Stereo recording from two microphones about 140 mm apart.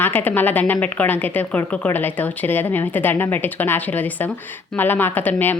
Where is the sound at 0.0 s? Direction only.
15° left (ahead or behind).